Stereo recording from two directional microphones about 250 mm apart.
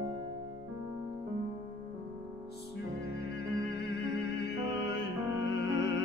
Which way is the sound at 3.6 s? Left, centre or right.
Left.